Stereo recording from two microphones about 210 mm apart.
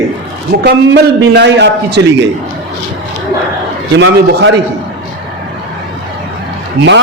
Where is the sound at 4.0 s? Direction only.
60° right (ahead or behind).